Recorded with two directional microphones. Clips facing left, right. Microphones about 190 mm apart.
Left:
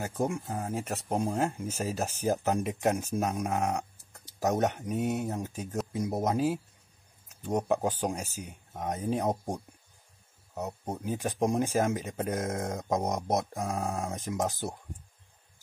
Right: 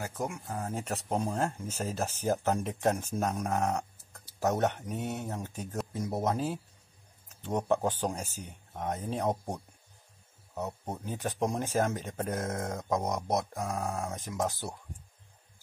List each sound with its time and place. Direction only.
0.0 s speech: 25° left (ahead or behind)
0.7 s speech: 5° left (ahead or behind)